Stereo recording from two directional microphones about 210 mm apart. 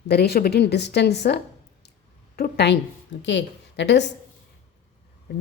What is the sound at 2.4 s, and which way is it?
A woman's voice, 55° left (ahead or behind).